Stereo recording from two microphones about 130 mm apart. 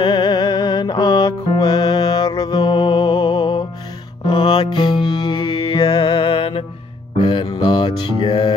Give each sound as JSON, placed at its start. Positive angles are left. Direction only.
{"t": 0.0, "sound": "music", "side_deg": 35}